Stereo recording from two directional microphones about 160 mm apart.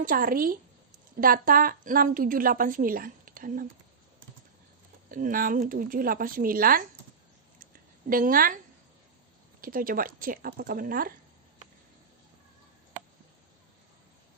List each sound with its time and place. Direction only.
0.0 s a woman's voice: 60° right (ahead or behind)
5.1 s a woman's voice: 60° right (ahead or behind)
7.7 s a sound: 60° right (ahead or behind)
9.6 s a woman's voice: 60° right (ahead or behind)